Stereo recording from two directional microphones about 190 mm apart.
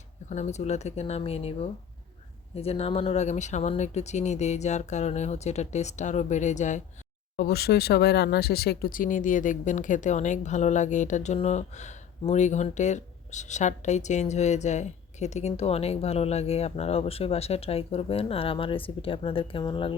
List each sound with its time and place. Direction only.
0.3 s speech: 35° left (ahead or behind)
7.3 s speech: 55° left (ahead or behind); by 20.0 s 25° left (ahead or behind)